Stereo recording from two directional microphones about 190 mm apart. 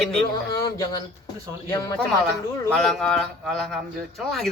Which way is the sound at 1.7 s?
15° left (ahead or behind).